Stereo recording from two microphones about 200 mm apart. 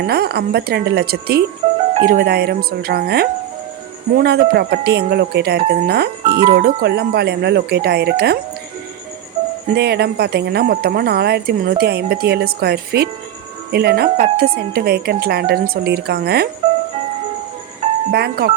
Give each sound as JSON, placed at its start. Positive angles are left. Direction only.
{"t": 0.0, "sound": "speech", "side_deg": -50}
{"t": 1.6, "sound": "music", "side_deg": -35}
{"t": 2.0, "sound": "speech", "side_deg": -50}
{"t": 9.7, "sound": "speech", "side_deg": -55}
{"t": 18.1, "sound": "speech", "side_deg": -50}